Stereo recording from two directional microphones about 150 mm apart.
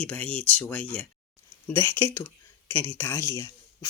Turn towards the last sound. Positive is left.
turn(degrees=25)  # may be behind; listen again after turning